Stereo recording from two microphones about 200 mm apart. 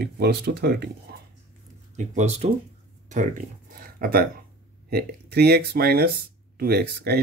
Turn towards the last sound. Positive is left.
turn(degrees=-50)  # may be behind; listen again after turning